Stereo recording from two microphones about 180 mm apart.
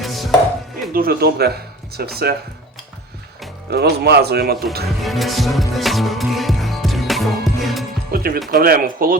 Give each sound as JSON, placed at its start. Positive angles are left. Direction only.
{"t": 0.0, "sound": "chopping", "side_deg": 0}
{"t": 0.9, "sound": "speech", "side_deg": -60}
{"t": 3.7, "sound": "speech", "side_deg": -65}
{"t": 5.0, "sound": "music", "side_deg": 0}
{"t": 8.1, "sound": "music", "side_deg": -55}
{"t": 8.4, "sound": "speech", "side_deg": -55}